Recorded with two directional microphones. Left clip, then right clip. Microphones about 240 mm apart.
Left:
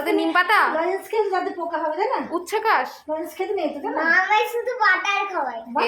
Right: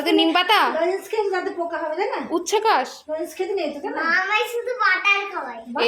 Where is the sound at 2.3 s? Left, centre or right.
Right.